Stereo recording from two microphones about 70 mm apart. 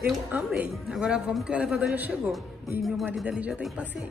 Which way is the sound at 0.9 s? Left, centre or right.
Centre.